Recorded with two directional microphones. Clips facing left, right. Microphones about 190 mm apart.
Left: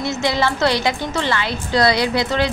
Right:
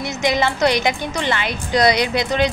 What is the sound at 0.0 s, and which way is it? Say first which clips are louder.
A woman's voice: even; 20° right (ahead or behind).